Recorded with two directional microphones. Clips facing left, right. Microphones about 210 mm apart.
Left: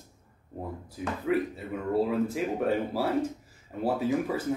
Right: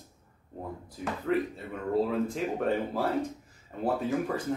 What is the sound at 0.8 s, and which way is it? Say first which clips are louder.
Speech: left 1 dB; 5° left (ahead or behind).